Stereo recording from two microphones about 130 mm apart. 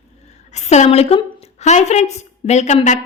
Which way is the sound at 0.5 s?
60° left (ahead or behind).